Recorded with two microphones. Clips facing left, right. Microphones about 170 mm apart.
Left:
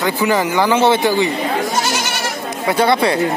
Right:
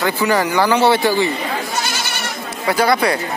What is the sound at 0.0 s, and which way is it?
Speech, 20° left (ahead or behind).